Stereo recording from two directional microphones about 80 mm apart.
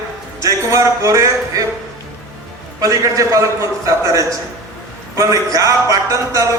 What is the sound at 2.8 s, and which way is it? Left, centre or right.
Speech, right.